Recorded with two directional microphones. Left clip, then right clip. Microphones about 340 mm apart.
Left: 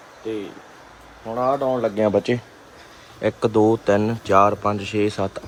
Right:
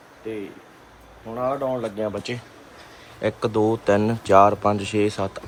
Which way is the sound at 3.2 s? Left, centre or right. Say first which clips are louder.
Left 3 dB; centre.